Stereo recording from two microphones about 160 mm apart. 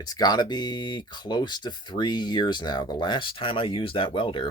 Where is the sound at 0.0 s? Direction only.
25° left (ahead or behind).